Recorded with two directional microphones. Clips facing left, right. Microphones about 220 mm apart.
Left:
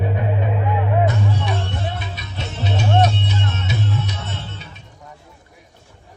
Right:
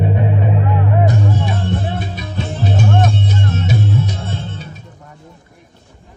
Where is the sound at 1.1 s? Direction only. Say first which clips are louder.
Right 4 dB; 45° right (ahead or behind).